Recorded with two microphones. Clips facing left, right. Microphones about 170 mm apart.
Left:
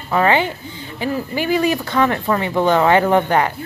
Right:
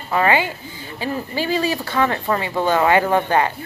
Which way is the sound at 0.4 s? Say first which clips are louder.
Left 3 dB; 20° left (ahead or behind).